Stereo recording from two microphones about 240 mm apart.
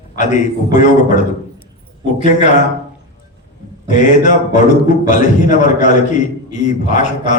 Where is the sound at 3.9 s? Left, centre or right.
Left.